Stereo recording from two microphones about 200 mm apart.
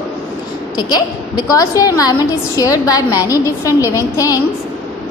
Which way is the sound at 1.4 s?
15° left (ahead or behind).